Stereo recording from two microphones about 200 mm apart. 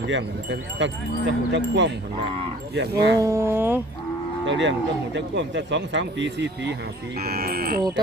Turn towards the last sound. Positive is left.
turn(degrees=-50)  # may be behind; listen again after turning